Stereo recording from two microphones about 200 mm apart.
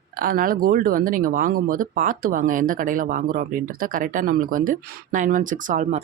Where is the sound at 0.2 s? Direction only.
45° right (ahead or behind).